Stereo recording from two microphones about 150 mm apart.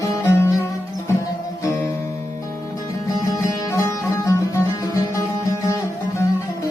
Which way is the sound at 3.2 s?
20° left (ahead or behind).